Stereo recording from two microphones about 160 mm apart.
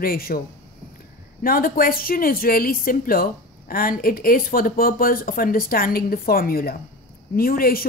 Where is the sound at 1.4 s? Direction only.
65° left (ahead or behind).